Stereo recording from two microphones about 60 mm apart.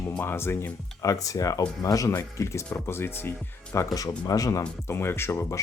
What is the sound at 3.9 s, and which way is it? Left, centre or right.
Speech, left.